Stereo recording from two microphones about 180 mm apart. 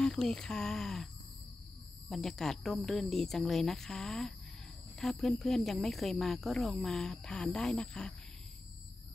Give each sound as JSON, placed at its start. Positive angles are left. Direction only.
{"t": 0.0, "sound": "speech", "side_deg": 5}
{"t": 2.0, "sound": "speech", "side_deg": 0}